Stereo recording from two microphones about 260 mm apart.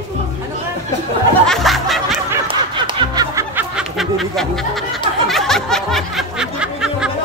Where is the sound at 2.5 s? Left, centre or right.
Centre.